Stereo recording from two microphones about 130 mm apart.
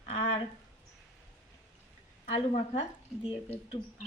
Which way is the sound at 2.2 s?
55° left (ahead or behind).